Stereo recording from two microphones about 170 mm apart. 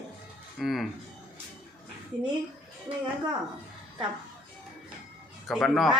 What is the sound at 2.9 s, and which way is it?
Speech, 30° right (ahead or behind).